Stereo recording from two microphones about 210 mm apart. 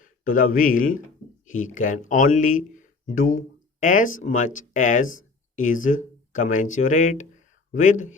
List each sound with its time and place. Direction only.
0.0 s speech: 40° left (ahead or behind)